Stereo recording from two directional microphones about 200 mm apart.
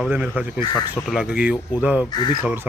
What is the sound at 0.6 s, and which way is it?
Speech, 20° left (ahead or behind).